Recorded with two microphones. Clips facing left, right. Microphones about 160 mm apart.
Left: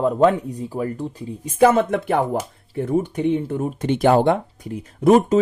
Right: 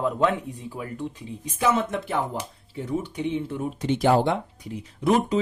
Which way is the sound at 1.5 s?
55° left (ahead or behind).